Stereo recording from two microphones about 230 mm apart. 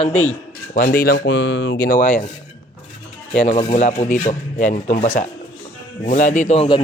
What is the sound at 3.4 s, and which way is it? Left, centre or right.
A man's voice, left.